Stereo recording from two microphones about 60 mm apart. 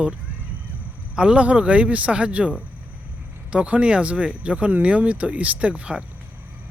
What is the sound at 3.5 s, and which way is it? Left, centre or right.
Speech, centre.